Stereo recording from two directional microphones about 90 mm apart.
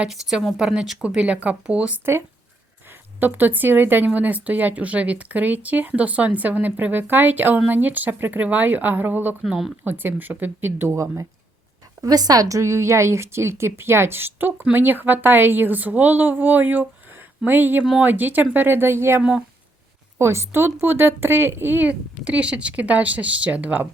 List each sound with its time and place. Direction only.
0.0 s speech: 5° right (ahead or behind)
3.2 s a woman's voice: 20° right (ahead or behind)
12.0 s a woman's voice: 45° right (ahead or behind); by 23.9 s 20° right (ahead or behind)